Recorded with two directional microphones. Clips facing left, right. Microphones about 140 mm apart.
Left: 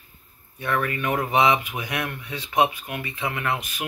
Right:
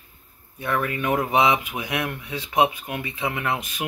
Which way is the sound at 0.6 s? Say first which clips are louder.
Even; 10° right (ahead or behind).